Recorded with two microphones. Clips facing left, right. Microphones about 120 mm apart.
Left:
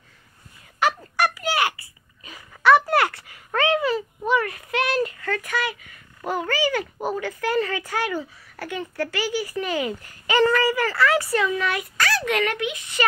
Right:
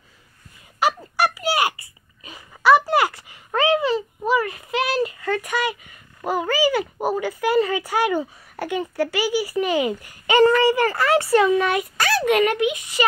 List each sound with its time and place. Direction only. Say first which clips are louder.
0.7 s a sound: right 1 dB; 10° right (ahead or behind)
5.2 s a sound: right 3 dB; 15° right (ahead or behind)
8.2 s speech: right 6 dB; 15° right (ahead or behind)
10.4 s speech: right 4 dB; 20° right (ahead or behind)
10.8 s speech: right 1 dB; 40° right (ahead or behind)
11.1 s speech: right 5 dB; 25° right (ahead or behind)